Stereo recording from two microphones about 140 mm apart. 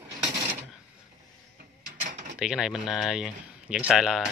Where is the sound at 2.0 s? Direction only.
60° right (ahead or behind).